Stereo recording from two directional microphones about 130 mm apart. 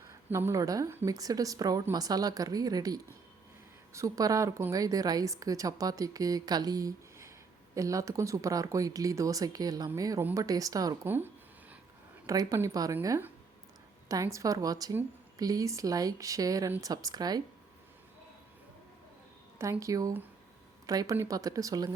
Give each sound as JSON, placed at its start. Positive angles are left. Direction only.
{"t": 0.1, "sound": "a woman's voice", "side_deg": -20}
{"t": 12.2, "sound": "a woman's voice", "side_deg": -25}
{"t": 19.8, "sound": "a woman's voice", "side_deg": -25}